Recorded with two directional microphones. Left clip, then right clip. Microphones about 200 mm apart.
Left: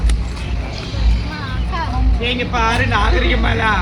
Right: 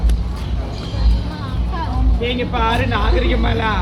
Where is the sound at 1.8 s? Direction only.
Centre (ahead or behind).